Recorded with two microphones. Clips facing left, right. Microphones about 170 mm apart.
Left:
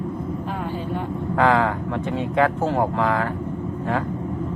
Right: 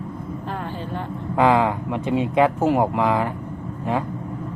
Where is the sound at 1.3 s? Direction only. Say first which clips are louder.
Right 1 dB; 15° right (ahead or behind).